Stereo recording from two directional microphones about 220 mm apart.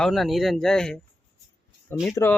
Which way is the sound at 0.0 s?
Centre (ahead or behind).